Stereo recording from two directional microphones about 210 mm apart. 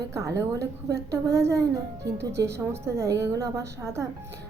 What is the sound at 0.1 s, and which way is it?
A woman's voice, 15° right (ahead or behind).